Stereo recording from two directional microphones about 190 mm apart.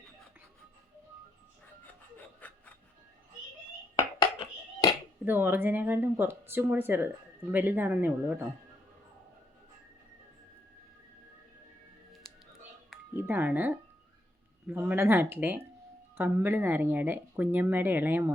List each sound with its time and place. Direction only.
2.4 s music: 10° left (ahead or behind)
3.9 s a sound: 20° left (ahead or behind)
5.2 s speech: 10° right (ahead or behind)
12.9 s music: 10° right (ahead or behind)
14.7 s speech: 10° right (ahead or behind)